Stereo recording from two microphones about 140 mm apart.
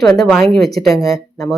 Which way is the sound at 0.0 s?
5° left (ahead or behind).